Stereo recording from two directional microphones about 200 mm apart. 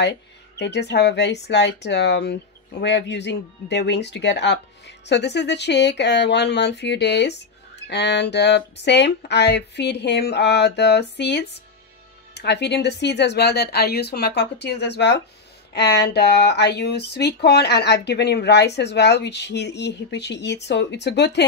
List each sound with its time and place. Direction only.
0.0 s speech: 55° left (ahead or behind)